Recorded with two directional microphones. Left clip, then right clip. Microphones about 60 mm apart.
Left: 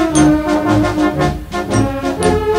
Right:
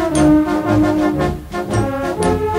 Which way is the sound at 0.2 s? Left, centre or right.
Right.